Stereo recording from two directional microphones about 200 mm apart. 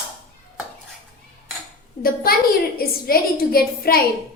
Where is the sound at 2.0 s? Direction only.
45° left (ahead or behind).